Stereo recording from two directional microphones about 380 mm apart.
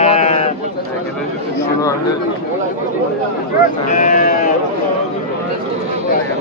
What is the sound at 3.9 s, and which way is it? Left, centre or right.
Speech, centre.